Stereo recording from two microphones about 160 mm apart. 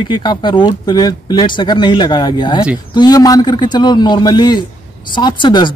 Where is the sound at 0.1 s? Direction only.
30° left (ahead or behind).